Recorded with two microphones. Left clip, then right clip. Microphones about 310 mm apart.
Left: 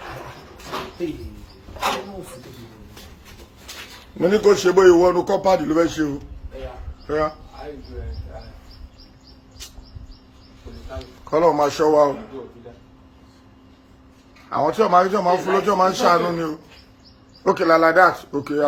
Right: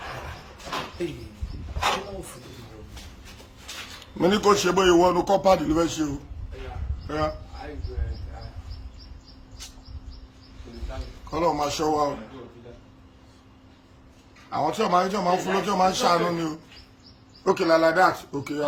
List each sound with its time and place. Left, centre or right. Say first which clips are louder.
4.3 s a man's voice: left 5 dB; centre
11.3 s speech: left 8 dB; centre
14.5 s a man's voice: left 6 dB; centre